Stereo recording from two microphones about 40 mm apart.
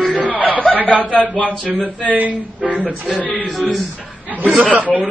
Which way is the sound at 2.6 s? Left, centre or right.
Left.